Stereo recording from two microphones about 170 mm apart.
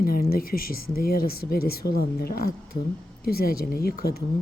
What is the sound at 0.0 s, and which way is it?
Speech, 60° left (ahead or behind).